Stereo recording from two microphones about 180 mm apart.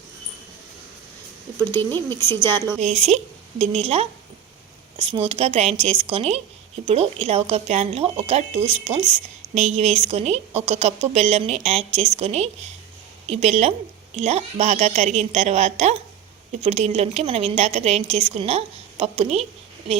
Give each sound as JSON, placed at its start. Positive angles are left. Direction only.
{"t": 1.7, "sound": "speech", "side_deg": 10}
{"t": 2.8, "sound": "a woman's voice", "side_deg": -35}